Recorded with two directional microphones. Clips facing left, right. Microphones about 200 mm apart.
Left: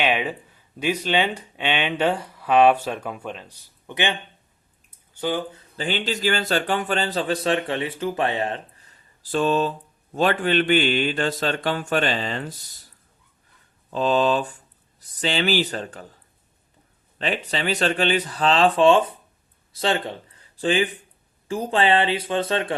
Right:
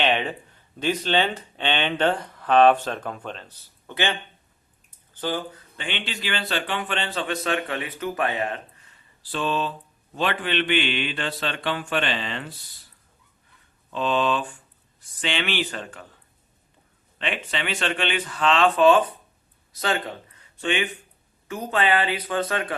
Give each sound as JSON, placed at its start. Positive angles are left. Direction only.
{"t": 0.0, "sound": "speech", "side_deg": 10}
{"t": 5.2, "sound": "speech", "side_deg": 15}
{"t": 5.5, "sound": "speech", "side_deg": 35}
{"t": 13.9, "sound": "speech", "side_deg": 40}
{"t": 17.2, "sound": "speech", "side_deg": 35}